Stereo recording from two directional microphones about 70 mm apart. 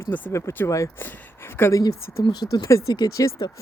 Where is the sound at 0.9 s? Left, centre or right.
Left.